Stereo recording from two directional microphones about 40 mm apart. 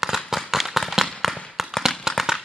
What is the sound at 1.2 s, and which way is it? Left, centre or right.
Tap, centre.